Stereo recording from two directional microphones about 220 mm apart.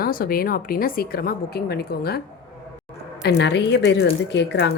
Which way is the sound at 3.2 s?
50° left (ahead or behind).